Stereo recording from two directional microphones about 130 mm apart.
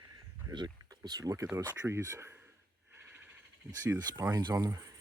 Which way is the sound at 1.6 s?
25° right (ahead or behind).